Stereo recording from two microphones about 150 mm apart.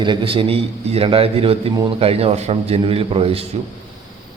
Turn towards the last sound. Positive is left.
turn(degrees=-40)  # may be behind; listen again after turning